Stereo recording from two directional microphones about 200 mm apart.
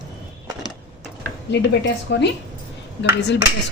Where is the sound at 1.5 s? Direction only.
60° left (ahead or behind).